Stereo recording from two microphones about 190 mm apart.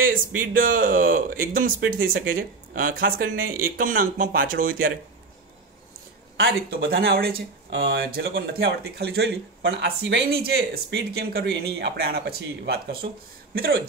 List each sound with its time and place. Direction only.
0.0 s a man's voice: 45° right (ahead or behind)
6.3 s speech: 55° right (ahead or behind)